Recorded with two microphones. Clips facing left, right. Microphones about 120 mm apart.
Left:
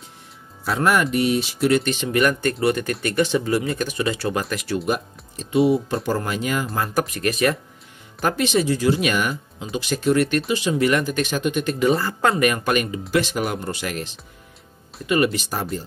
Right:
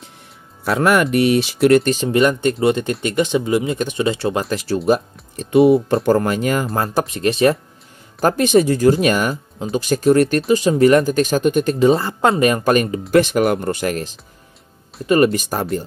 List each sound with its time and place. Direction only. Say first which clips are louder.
0.7 s speech: right 4 dB; 65° right (ahead or behind)
1.7 s speech: right 6 dB; 45° right (ahead or behind)
2.0 s speech: right 4 dB; 25° right (ahead or behind)
5.3 s speech: right 6 dB; 55° right (ahead or behind)
6.9 s speech: right 4 dB; 25° right (ahead or behind)
8.2 s speech: right 6 dB; 40° right (ahead or behind)
11.9 s speech: right 4 dB; 25° right (ahead or behind)
13.1 s speech: right 8 dB; 55° right (ahead or behind)